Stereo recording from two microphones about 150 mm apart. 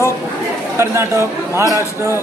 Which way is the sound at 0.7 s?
20° right (ahead or behind).